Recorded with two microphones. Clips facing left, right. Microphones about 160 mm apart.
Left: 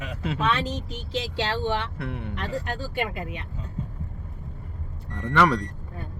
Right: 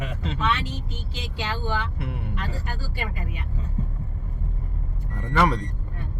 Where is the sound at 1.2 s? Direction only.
30° left (ahead or behind).